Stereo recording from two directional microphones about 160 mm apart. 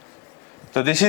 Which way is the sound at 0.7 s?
5° left (ahead or behind).